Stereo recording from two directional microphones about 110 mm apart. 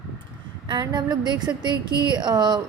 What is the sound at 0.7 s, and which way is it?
A woman's voice, 40° right (ahead or behind).